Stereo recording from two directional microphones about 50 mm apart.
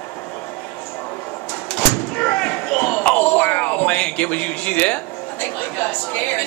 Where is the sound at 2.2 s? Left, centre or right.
Left.